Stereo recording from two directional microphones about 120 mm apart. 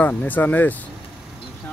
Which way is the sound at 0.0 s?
15° left (ahead or behind).